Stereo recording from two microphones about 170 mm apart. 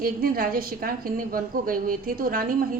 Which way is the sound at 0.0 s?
60° right (ahead or behind).